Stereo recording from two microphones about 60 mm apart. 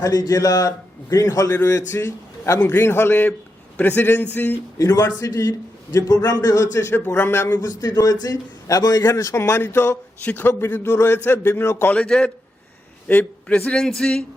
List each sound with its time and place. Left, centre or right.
0.0 s speech: left
1.1 s a man's voice: left
1.6 s speech: left
2.7 s a man's voice: left
4.8 s a man's voice: left
6.9 s a man's voice: left
7.5 s a man's voice: left
9.4 s speech: left
10.2 s a man's voice: left
10.5 s a man's voice: left
11.9 s a man's voice: centre
13.5 s a man's voice: centre